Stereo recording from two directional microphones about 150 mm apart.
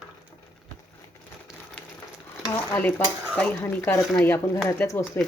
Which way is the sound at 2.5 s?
10° left (ahead or behind).